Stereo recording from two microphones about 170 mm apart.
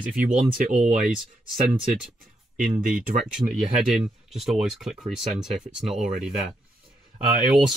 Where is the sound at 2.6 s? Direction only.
55° right (ahead or behind).